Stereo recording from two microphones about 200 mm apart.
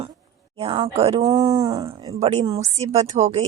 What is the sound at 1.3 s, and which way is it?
Speech, 20° right (ahead or behind).